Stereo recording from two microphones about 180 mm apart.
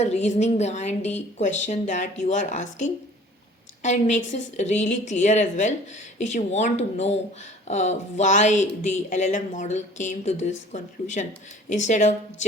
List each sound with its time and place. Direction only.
0.0 s speech: 40° left (ahead or behind)